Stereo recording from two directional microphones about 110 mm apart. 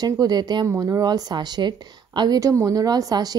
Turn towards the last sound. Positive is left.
turn(degrees=-35)  # may be behind; listen again after turning